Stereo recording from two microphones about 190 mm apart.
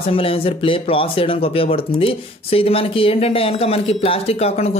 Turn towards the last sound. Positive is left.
turn(degrees=30)  # may be behind; listen again after turning